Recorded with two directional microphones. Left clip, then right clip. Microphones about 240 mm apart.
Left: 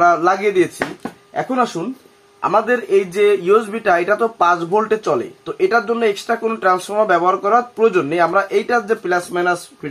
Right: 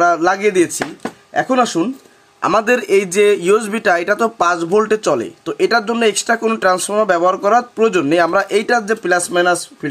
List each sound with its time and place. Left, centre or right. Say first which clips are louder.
0.0 s a man's voice: even; right